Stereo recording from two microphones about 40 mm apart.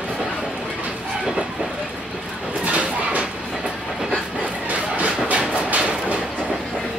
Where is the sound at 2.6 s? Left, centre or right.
Right.